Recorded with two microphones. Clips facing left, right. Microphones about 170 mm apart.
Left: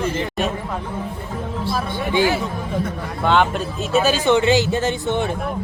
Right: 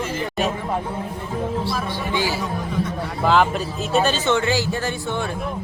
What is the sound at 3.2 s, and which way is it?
Speech, centre (ahead or behind).